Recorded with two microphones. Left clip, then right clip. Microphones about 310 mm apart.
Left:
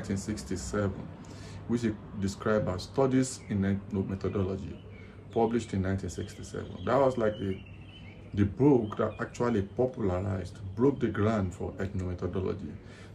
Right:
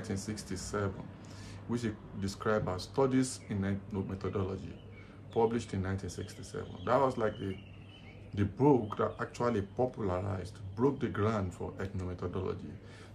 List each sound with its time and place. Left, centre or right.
0.0 s speech: centre